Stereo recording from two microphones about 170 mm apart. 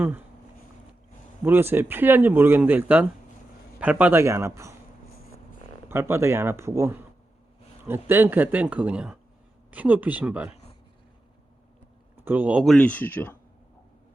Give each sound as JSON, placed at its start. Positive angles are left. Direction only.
{"t": 1.5, "sound": "speech", "side_deg": -10}
{"t": 5.9, "sound": "speech", "side_deg": -15}
{"t": 12.1, "sound": "speech", "side_deg": -10}